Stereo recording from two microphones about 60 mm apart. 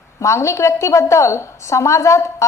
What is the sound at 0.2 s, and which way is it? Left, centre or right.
A woman's voice, left.